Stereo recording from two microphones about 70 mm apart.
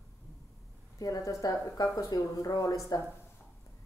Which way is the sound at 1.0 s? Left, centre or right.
Left.